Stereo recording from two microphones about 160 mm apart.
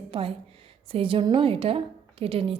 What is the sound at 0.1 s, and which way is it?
A woman's voice, 35° right (ahead or behind).